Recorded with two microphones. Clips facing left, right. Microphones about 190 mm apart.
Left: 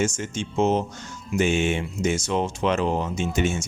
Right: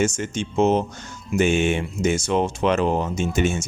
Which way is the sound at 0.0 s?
60° right (ahead or behind).